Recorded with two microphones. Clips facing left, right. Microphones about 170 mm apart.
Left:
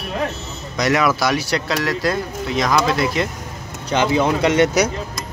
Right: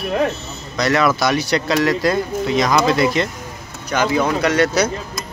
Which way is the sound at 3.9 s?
25° left (ahead or behind).